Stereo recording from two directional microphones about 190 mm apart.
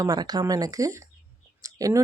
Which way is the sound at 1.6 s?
20° right (ahead or behind).